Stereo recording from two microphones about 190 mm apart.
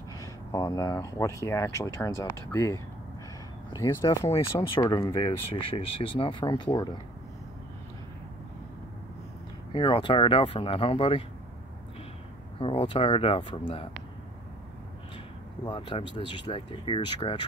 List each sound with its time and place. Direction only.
0.2 s speech: 20° left (ahead or behind)
9.7 s speech: 25° left (ahead or behind)
12.5 s speech: 30° left (ahead or behind)
15.6 s speech: 25° left (ahead or behind)